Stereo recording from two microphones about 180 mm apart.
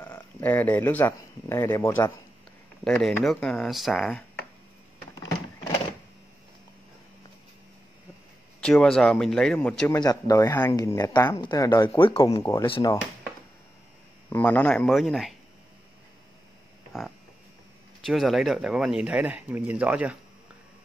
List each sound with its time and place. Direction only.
0.0 s speech: 10° left (ahead or behind)
8.5 s speech: 5° left (ahead or behind)
9.9 s speech: 20° left (ahead or behind)
12.6 s speech: 30° left (ahead or behind)
14.3 s speech: 10° left (ahead or behind)
18.0 s speech: centre (ahead or behind)